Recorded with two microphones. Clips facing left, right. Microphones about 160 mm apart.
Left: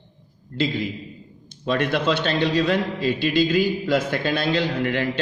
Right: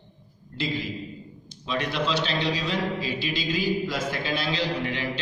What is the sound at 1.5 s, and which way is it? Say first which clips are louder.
A man's voice: left 7 dB; 55° left (ahead or behind).